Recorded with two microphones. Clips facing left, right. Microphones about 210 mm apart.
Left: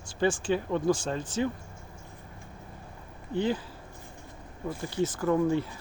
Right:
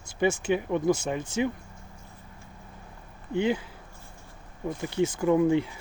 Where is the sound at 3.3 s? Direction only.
15° right (ahead or behind).